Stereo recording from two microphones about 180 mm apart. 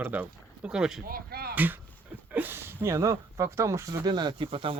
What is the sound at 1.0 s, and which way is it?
Speech, 55° right (ahead or behind).